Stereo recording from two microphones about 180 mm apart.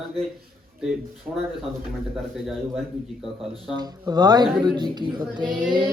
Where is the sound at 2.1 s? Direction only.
Centre (ahead or behind).